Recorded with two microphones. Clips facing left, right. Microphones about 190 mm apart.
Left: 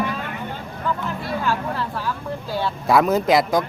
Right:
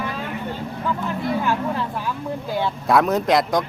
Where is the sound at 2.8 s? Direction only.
Centre (ahead or behind).